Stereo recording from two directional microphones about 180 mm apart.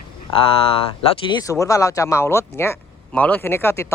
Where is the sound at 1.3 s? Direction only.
20° left (ahead or behind).